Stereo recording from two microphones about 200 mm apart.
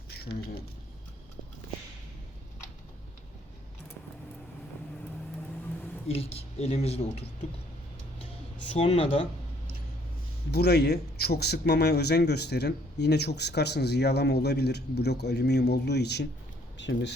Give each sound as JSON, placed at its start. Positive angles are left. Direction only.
{"t": 6.3, "sound": "speech", "side_deg": 30}
{"t": 8.7, "sound": "speech", "side_deg": 30}
{"t": 10.5, "sound": "speech", "side_deg": 55}